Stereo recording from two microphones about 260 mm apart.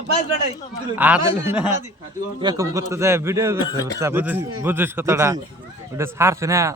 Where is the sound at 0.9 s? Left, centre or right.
Centre.